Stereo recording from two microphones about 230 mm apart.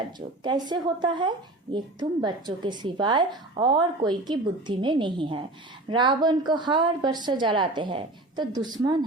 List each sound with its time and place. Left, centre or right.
0.4 s a woman's voice: centre